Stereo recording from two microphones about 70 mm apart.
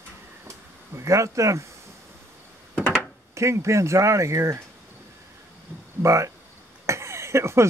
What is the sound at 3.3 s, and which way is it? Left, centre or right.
Speech, right.